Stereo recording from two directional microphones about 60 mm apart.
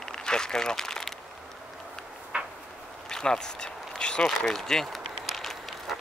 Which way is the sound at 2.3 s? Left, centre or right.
Right.